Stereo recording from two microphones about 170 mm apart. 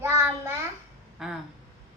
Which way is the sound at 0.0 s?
15° right (ahead or behind).